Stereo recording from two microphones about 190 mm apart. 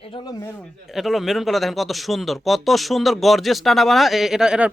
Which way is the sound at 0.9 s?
Centre (ahead or behind).